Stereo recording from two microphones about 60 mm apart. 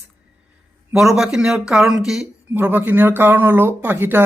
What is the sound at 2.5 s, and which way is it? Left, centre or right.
Speech, right.